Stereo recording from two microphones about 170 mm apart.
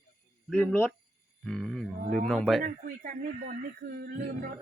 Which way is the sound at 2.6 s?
55° right (ahead or behind).